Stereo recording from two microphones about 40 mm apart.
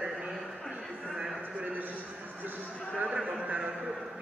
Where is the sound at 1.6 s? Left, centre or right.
Right.